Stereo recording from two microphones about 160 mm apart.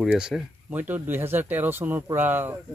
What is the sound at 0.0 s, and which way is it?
Speech, 5° right (ahead or behind).